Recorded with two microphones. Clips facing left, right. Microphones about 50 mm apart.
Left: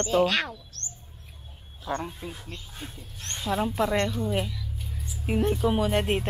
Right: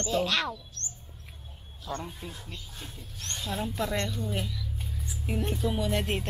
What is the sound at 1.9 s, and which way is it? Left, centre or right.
Speech, left.